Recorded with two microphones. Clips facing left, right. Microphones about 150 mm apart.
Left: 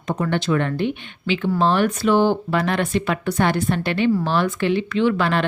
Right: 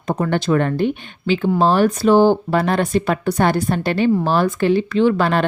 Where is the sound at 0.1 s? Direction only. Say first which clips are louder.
Right 3 dB; 40° right (ahead or behind).